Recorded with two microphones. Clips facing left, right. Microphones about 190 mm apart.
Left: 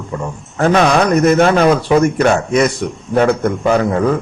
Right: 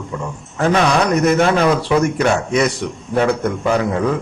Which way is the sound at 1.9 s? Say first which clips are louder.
Left 4 dB; 45° left (ahead or behind).